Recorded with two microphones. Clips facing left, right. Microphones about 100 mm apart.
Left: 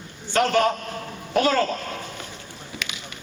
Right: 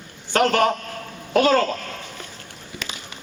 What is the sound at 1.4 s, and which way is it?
Speech, 60° right (ahead or behind).